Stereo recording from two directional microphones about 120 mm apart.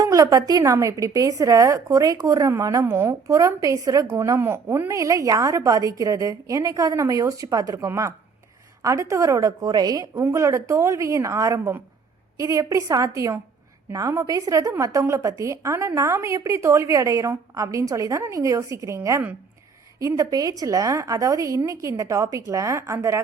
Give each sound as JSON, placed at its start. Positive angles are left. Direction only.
{"t": 0.0, "sound": "a woman's voice", "side_deg": -30}
{"t": 4.0, "sound": "a woman's voice", "side_deg": -15}